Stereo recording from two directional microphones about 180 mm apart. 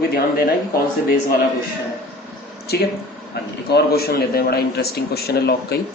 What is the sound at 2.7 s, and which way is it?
A man's voice, 65° left (ahead or behind).